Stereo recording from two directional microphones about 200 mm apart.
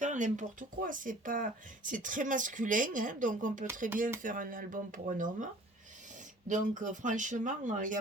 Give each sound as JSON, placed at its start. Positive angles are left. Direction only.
{"t": 0.0, "sound": "speech", "side_deg": -40}
{"t": 6.5, "sound": "speech", "side_deg": -40}